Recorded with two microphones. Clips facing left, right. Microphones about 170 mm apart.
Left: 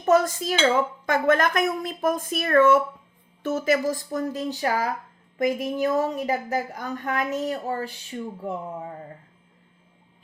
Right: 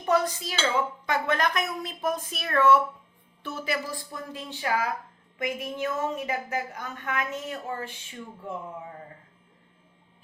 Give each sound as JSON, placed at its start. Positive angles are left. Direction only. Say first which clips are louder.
{"t": 0.0, "sound": "a woman's voice", "louder": "left 5 dB", "side_deg": 45}